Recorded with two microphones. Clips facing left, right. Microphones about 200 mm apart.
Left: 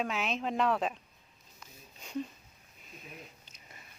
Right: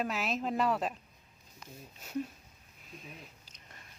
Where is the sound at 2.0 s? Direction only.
5° right (ahead or behind).